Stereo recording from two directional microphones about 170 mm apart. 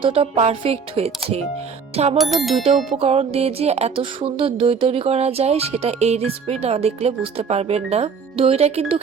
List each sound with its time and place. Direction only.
0.0 s music: 35° right (ahead or behind)
2.1 s music: centre (ahead or behind)
3.0 s music: 35° right (ahead or behind)